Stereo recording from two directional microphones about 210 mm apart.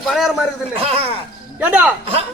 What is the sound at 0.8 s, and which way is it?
Speech, 25° right (ahead or behind).